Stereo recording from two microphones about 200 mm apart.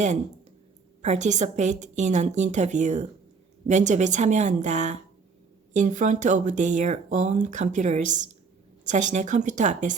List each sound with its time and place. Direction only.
1.0 s speech: 35° right (ahead or behind)